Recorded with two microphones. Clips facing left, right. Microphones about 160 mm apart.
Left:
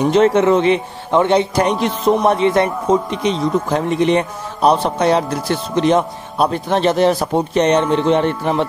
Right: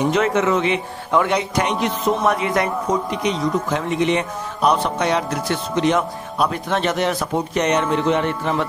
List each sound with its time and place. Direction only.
0.1 s a man's voice: 30° left (ahead or behind)